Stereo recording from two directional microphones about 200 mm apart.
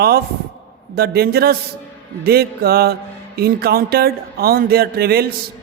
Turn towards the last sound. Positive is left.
turn(degrees=-50)  # may be behind; listen again after turning